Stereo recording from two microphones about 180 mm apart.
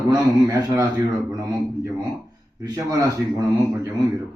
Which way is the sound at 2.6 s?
20° right (ahead or behind).